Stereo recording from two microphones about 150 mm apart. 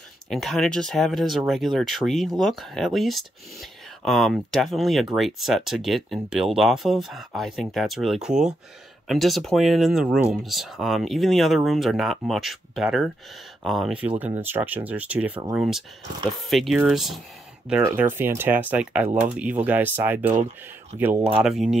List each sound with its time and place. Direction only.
0.3 s speech: centre (ahead or behind)
17.8 s speech: 15° right (ahead or behind)